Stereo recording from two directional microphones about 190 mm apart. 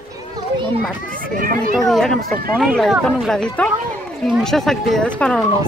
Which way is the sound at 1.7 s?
Centre (ahead or behind).